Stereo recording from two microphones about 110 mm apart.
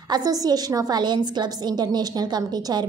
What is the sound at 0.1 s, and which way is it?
A woman's voice, 35° right (ahead or behind).